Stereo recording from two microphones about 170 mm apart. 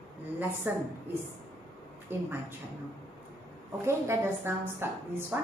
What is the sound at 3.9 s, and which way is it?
A woman's voice, 15° right (ahead or behind).